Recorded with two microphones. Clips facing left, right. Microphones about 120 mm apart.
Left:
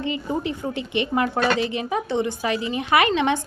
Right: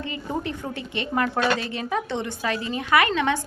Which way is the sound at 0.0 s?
15° left (ahead or behind).